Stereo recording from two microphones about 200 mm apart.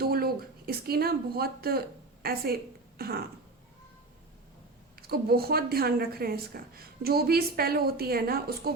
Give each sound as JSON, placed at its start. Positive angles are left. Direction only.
{"t": 0.0, "sound": "a woman's voice", "side_deg": -50}
{"t": 4.9, "sound": "a woman's voice", "side_deg": -50}